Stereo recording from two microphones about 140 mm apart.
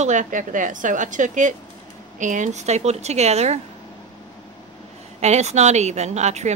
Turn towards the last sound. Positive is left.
turn(degrees=-55)  # may be behind; listen again after turning